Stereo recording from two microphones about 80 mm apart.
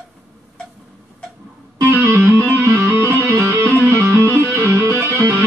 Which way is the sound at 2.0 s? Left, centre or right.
Right.